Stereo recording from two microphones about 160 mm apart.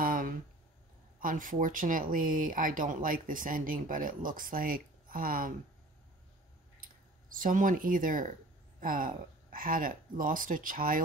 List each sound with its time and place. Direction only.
0.0 s a sound: 60° right (ahead or behind)
1.2 s speech: 55° right (ahead or behind)
6.8 s speech: 60° right (ahead or behind)